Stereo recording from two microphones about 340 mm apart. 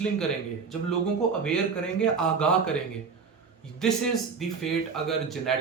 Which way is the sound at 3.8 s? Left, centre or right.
Centre.